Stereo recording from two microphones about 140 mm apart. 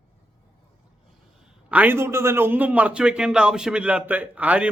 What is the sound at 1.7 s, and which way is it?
A man's voice, 10° right (ahead or behind).